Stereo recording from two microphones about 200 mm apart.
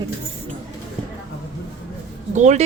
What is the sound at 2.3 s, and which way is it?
Speech, 35° right (ahead or behind).